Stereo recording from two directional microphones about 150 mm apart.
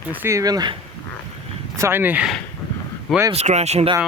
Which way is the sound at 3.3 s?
45° right (ahead or behind).